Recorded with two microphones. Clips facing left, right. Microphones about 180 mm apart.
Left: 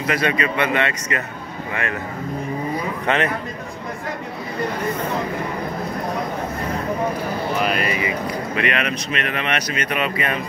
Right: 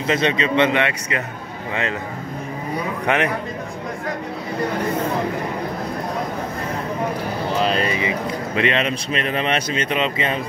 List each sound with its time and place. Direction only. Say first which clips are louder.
0.0 s speech: right 1 dB; 25° right (ahead or behind)
3.1 s a man's voice: even; 15° right (ahead or behind)
7.5 s speech: right 3 dB; 30° right (ahead or behind)